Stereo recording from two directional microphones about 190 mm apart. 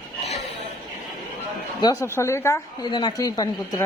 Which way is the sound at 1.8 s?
15° left (ahead or behind).